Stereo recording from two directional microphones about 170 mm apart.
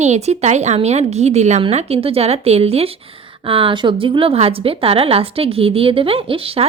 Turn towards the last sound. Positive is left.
turn(degrees=-35)  # may be behind; listen again after turning